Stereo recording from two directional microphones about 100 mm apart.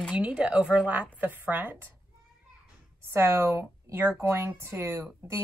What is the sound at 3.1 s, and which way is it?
A woman's voice, 25° right (ahead or behind).